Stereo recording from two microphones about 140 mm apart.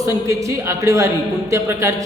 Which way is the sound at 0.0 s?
20° right (ahead or behind).